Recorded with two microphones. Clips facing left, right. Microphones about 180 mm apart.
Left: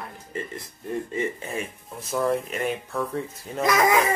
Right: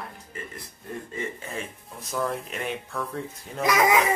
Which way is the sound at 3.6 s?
10° right (ahead or behind).